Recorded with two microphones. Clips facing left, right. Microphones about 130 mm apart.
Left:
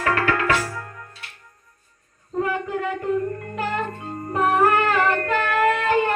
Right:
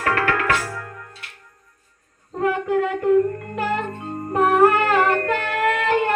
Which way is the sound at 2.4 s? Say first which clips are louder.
Right 4 dB; 70° right (ahead or behind).